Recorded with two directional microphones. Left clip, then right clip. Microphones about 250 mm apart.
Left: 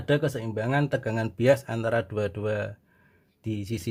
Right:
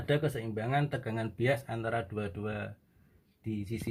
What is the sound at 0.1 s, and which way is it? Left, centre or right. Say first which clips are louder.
Speech: left 6 dB; left.